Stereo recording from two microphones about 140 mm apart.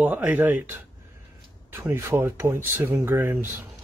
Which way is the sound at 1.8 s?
15° right (ahead or behind).